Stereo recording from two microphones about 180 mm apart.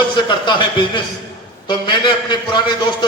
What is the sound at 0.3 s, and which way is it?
A man's voice, 25° left (ahead or behind).